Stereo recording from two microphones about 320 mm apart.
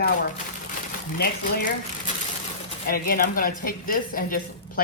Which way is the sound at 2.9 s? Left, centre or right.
Left.